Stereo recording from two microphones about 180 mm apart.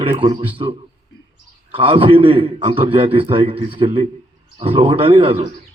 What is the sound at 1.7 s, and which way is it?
A man's voice, 30° right (ahead or behind).